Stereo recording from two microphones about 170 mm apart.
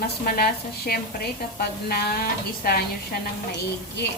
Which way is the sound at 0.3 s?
65° left (ahead or behind).